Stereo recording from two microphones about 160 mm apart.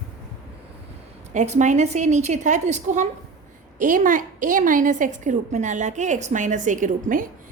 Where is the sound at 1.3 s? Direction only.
50° right (ahead or behind).